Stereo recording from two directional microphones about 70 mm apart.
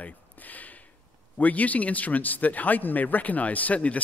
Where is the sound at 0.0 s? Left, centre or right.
Left.